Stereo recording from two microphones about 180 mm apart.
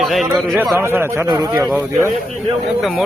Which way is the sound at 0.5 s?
10° right (ahead or behind).